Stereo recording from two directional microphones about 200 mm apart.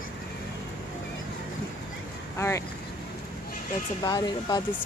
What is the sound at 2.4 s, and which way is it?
Speech, 15° left (ahead or behind).